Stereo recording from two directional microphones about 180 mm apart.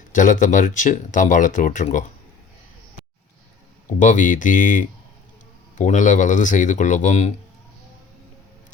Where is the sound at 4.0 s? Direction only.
45° left (ahead or behind).